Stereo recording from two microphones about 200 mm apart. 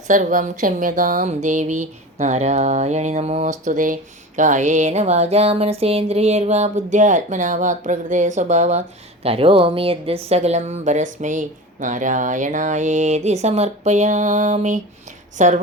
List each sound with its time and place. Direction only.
0.1 s a woman's voice: 40° right (ahead or behind)